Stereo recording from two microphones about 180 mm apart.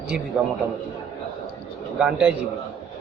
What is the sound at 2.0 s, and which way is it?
Speech, 5° right (ahead or behind).